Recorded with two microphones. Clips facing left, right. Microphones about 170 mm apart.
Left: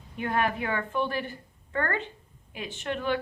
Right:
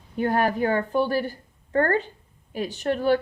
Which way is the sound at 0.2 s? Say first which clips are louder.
Right 6 dB; 40° right (ahead or behind).